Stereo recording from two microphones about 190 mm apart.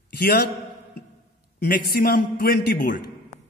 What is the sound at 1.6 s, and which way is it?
A man's voice, 50° left (ahead or behind).